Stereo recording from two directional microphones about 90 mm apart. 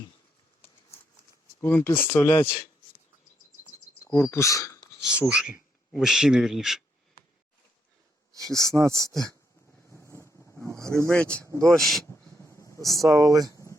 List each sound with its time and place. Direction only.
1.6 s speech: 25° left (ahead or behind)
4.0 s speech: 30° left (ahead or behind)
4.9 s a sound: 10° right (ahead or behind)
5.3 s speech: 10° right (ahead or behind)
8.4 s speech: 5° left (ahead or behind)
8.7 s speech: 35° right (ahead or behind)
9.0 s speech: 5° left (ahead or behind)
9.9 s vehicle: 30° left (ahead or behind)
10.6 s vehicle: 35° right (ahead or behind)
11.1 s speech: 15° left (ahead or behind)
11.6 s speech: centre (ahead or behind)
12.5 s a sound: 35° left (ahead or behind)
13.0 s speech: 40° right (ahead or behind)